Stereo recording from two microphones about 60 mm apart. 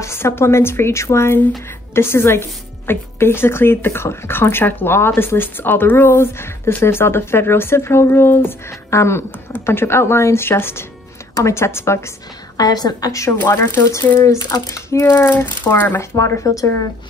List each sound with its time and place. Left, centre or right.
0.0 s speech: left
12.5 s a woman's voice: left
13.4 s speech: left
14.2 s speech: left
15.0 s speech: left
16.0 s speech: left